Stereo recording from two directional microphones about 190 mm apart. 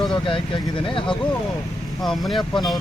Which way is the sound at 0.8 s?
25° left (ahead or behind).